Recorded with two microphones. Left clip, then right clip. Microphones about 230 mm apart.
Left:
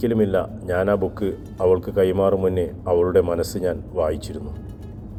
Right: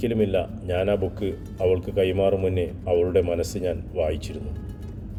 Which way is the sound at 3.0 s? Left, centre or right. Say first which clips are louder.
Left 3 dB; centre.